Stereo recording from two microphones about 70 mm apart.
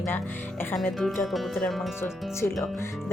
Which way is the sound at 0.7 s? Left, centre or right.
Centre.